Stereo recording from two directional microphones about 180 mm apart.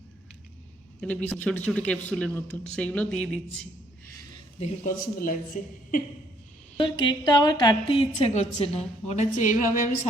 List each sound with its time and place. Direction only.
1.0 s speech: 10° left (ahead or behind)
4.6 s a woman's voice: 45° left (ahead or behind)
6.7 s a woman's voice: 25° left (ahead or behind); by 10.1 s 50° left (ahead or behind)